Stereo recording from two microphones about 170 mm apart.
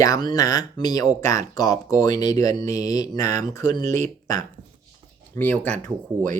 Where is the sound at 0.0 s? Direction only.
20° left (ahead or behind).